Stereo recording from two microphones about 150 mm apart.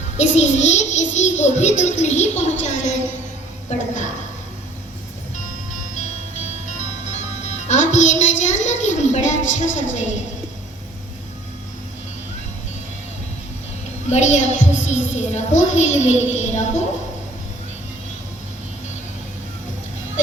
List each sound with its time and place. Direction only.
0.2 s a child's voice: 50° left (ahead or behind)
6.7 s a woman's voice: 50° left (ahead or behind)
14.1 s a child's voice: 50° left (ahead or behind)